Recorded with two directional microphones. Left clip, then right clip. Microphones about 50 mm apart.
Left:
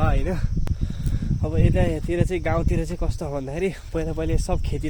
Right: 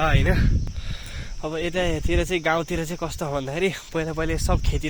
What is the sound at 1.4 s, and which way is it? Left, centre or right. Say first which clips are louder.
Speech: even; left.